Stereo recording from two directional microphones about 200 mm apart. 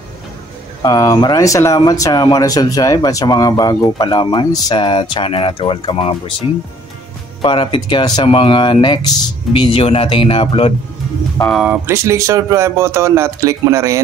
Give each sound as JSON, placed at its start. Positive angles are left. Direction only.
{"t": 0.8, "sound": "speech", "side_deg": 20}
{"t": 7.4, "sound": "speech", "side_deg": 25}
{"t": 11.4, "sound": "speech", "side_deg": 0}